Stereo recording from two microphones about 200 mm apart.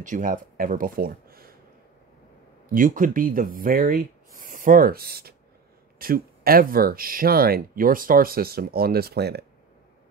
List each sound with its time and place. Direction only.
0.0 s speech: 40° right (ahead or behind)
2.7 s speech: 45° right (ahead or behind)